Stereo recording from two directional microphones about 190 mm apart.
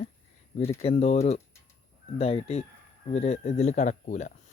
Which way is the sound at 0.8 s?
35° left (ahead or behind).